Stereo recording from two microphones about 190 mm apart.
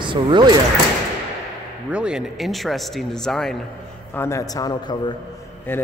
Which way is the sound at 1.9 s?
5° right (ahead or behind).